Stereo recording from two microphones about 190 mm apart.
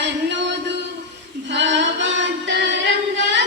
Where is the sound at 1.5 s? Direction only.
70° right (ahead or behind).